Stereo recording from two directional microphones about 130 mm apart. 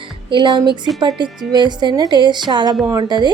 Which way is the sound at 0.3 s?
35° right (ahead or behind).